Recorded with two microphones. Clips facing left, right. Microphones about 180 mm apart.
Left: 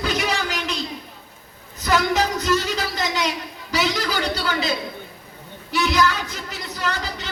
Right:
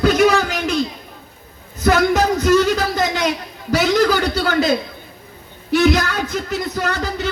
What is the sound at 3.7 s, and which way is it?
A man's voice, 50° right (ahead or behind).